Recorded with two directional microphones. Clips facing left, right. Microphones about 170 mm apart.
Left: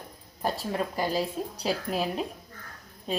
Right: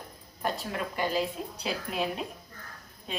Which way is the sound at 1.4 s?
35° left (ahead or behind).